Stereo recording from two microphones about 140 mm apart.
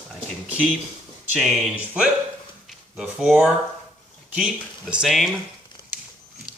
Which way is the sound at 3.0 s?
5° right (ahead or behind).